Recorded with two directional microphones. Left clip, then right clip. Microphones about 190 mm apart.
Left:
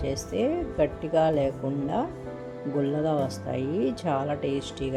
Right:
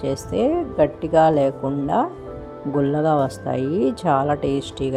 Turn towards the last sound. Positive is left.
turn(degrees=-20)  # may be behind; listen again after turning